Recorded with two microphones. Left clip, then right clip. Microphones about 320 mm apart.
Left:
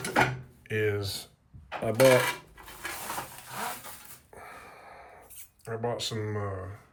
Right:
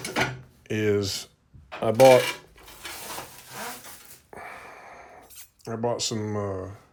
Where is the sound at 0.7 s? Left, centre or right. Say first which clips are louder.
Right 5 dB; centre.